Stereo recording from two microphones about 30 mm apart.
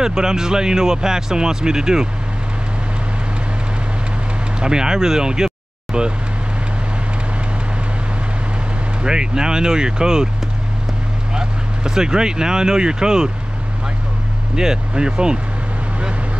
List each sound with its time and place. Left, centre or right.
0.0 s speech: right
4.6 s speech: right
9.0 s speech: right
11.3 s speech: right
14.5 s speech: right